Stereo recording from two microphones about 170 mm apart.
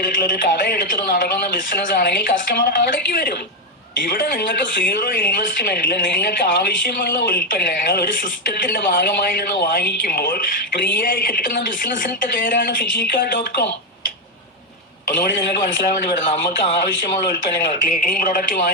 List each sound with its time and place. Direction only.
0.2 s a woman's voice: 60° left (ahead or behind)
2.0 s a woman's voice: 70° left (ahead or behind); by 16.8 s 40° left (ahead or behind)
18.2 s a woman's voice: 55° left (ahead or behind)